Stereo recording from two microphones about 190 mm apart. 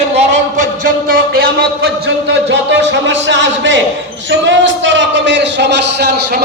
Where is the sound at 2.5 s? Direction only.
70° right (ahead or behind).